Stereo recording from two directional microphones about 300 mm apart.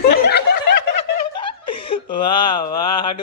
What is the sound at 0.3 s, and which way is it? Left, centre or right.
Snicker, left.